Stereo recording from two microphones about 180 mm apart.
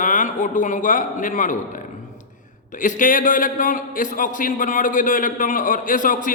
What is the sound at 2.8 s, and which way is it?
A man's voice, 45° left (ahead or behind).